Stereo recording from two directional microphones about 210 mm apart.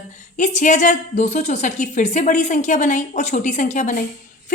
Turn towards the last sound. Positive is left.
turn(degrees=35)  # may be behind; listen again after turning